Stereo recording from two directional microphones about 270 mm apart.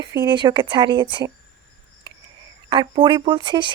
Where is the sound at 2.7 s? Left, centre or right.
Centre.